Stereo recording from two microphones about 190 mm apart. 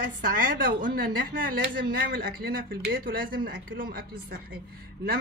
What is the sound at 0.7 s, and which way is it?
Speech, 45° right (ahead or behind).